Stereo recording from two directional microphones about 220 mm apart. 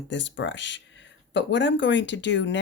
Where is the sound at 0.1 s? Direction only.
55° left (ahead or behind).